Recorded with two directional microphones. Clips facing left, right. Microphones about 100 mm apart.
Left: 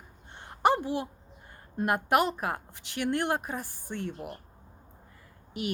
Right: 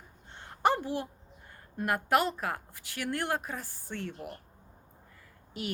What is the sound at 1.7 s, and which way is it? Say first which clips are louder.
A woman's voice: left 2 dB; 20° left (ahead or behind).